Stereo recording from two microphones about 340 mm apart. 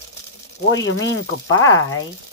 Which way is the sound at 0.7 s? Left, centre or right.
Left.